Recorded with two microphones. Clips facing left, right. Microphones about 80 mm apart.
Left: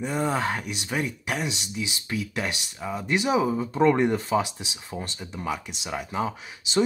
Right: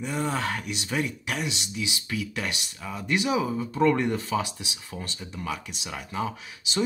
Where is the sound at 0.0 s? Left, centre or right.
Centre.